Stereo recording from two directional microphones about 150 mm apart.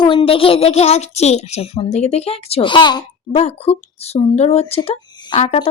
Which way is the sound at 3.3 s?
45° left (ahead or behind).